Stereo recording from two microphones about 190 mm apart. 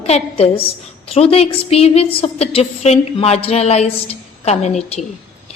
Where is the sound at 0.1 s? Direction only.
30° left (ahead or behind).